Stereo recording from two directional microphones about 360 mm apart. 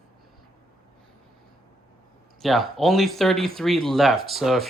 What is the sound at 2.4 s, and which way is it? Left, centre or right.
Speech, centre.